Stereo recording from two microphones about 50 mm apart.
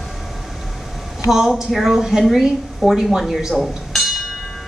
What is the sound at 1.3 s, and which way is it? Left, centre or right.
Speech, centre.